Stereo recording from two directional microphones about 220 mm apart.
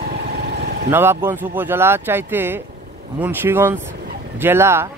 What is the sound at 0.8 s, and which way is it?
Speech, 10° right (ahead or behind).